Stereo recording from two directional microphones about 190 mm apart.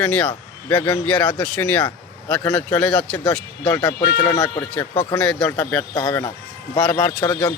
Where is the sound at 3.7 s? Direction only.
20° left (ahead or behind).